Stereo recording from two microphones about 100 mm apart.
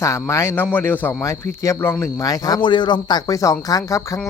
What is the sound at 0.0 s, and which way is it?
Speech, 30° left (ahead or behind).